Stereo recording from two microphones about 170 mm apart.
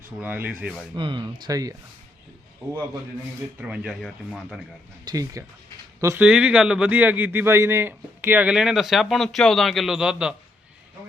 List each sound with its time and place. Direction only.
0.2 s speech: 10° right (ahead or behind)
0.9 s speech: 30° right (ahead or behind)
3.6 s speech: 5° right (ahead or behind)
5.0 s speech: 20° right (ahead or behind)
6.2 s speech: 5° right (ahead or behind)